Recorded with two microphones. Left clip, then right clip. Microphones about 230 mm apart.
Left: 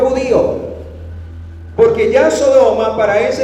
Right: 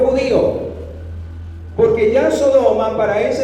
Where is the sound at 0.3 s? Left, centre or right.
Left.